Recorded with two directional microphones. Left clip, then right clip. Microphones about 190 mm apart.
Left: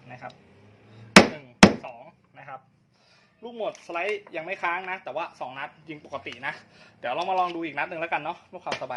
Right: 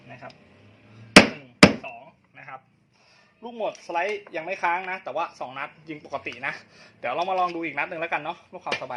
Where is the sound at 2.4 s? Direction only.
Centre (ahead or behind).